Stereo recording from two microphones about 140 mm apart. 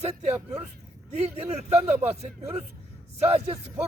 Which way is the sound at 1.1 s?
50° right (ahead or behind).